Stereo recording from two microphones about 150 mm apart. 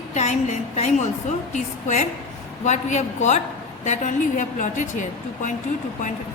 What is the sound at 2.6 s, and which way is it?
A woman's voice, 50° left (ahead or behind).